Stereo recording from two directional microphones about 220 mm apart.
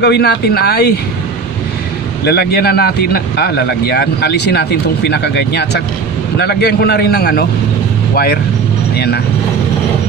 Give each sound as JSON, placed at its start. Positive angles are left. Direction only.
{"t": 0.0, "sound": "speech", "side_deg": 50}
{"t": 2.2, "sound": "speech", "side_deg": 45}
{"t": 8.9, "sound": "vehicle", "side_deg": 45}